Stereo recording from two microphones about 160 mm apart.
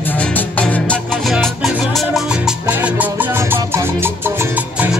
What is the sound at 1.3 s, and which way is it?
Music, 5° right (ahead or behind).